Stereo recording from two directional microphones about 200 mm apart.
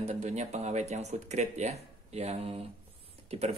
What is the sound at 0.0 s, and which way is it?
Speech, 35° right (ahead or behind).